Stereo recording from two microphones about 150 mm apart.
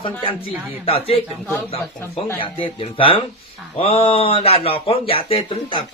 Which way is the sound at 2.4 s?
35° left (ahead or behind).